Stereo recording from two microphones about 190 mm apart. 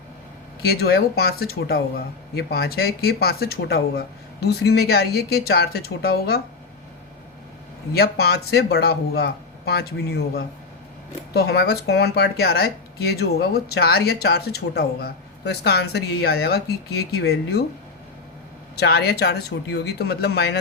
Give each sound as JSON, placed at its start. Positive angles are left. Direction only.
{"t": 0.6, "sound": "speech", "side_deg": 55}
{"t": 7.9, "sound": "speech", "side_deg": 55}
{"t": 18.8, "sound": "speech", "side_deg": 60}